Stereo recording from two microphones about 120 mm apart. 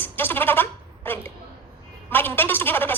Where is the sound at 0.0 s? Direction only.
15° left (ahead or behind).